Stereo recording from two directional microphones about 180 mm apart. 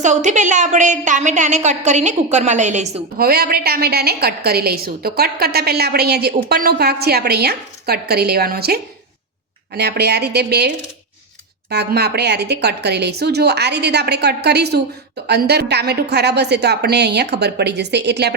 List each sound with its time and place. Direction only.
0.0 s a woman's voice: 40° right (ahead or behind)
3.2 s a woman's voice: 60° right (ahead or behind)
11.7 s a woman's voice: 65° right (ahead or behind)